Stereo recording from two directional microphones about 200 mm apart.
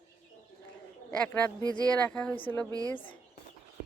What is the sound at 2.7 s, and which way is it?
Speech, 20° right (ahead or behind).